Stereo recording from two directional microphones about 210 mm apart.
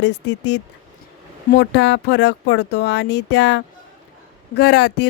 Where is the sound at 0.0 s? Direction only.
55° left (ahead or behind).